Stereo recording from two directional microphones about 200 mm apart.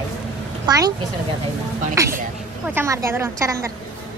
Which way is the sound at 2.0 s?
15° right (ahead or behind).